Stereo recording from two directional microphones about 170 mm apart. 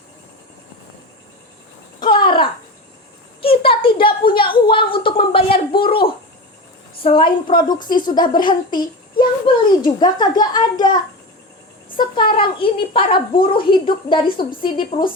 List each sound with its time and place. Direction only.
2.0 s a sound: 25° left (ahead or behind)
7.0 s a woman's voice: 30° left (ahead or behind)
11.9 s a woman's voice: 30° left (ahead or behind)